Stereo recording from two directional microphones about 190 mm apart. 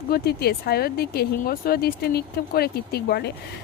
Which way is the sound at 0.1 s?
55° left (ahead or behind).